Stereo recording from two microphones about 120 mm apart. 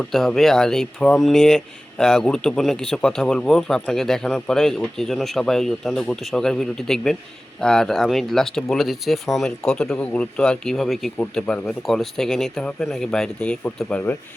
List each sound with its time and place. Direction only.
0.0 s speech: 5° left (ahead or behind)